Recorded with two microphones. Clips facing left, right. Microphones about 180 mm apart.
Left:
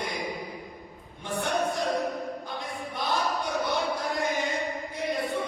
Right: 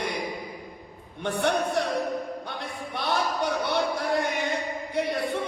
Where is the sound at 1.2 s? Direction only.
70° right (ahead or behind).